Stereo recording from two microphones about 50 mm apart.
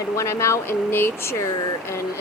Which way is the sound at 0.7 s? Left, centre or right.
Left.